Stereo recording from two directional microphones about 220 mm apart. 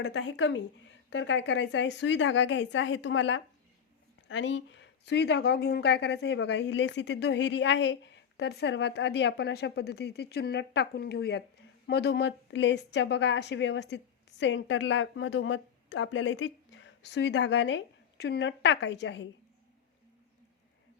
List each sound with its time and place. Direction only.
0.0 s a woman's voice: 55° left (ahead or behind)